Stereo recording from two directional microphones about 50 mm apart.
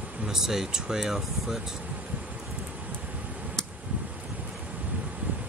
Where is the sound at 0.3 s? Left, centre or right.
Centre.